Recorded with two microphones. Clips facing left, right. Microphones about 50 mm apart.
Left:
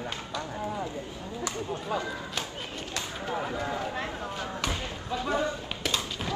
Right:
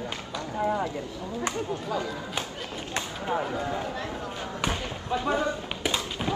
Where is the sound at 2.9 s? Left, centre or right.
Right.